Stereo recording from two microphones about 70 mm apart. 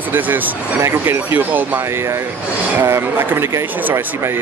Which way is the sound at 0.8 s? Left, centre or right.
Right.